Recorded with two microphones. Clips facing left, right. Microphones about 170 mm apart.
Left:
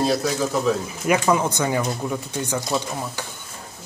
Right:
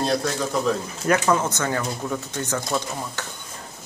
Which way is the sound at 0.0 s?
5° left (ahead or behind).